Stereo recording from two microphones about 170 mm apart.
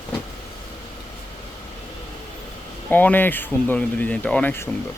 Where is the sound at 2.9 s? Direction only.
10° left (ahead or behind).